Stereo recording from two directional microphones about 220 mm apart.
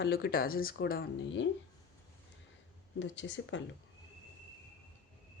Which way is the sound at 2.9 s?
55° left (ahead or behind).